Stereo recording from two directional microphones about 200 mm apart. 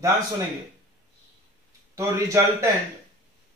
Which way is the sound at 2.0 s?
15° right (ahead or behind).